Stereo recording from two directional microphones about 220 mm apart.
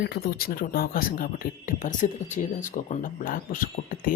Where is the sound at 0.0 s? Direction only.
45° left (ahead or behind).